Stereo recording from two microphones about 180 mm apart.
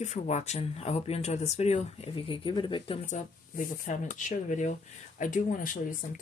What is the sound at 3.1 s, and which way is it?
Speech, 45° left (ahead or behind).